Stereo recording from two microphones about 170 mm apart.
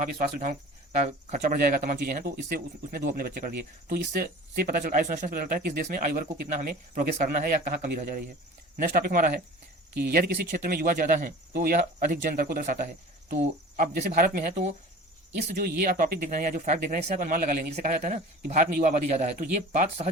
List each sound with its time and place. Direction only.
0.0 s speech: 50° right (ahead or behind)
15.5 s speech: 55° right (ahead or behind)